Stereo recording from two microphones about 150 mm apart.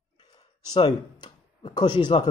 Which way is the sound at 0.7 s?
30° left (ahead or behind).